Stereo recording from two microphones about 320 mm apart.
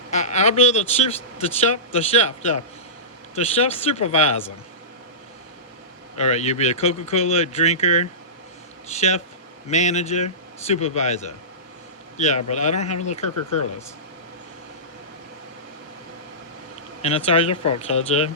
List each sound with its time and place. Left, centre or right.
0.1 s speech: left
6.1 s a man's voice: left
17.0 s speech: centre